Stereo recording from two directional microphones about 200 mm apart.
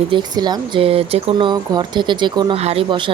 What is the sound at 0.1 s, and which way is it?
Speech, 20° right (ahead or behind).